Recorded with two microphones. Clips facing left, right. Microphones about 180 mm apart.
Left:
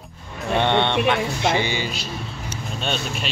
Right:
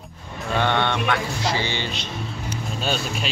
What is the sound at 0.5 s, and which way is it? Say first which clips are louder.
A man's voice: left 3 dB; 25° left (ahead or behind).